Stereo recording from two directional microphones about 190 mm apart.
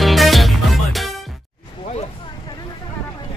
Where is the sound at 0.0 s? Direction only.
Centre (ahead or behind).